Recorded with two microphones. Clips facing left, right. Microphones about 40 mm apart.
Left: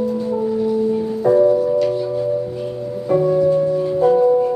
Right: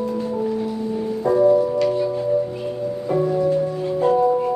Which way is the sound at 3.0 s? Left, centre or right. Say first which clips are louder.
Left 5 dB; centre.